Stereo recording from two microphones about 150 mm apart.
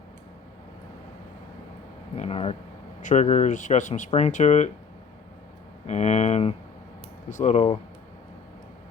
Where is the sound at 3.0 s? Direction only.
50° left (ahead or behind).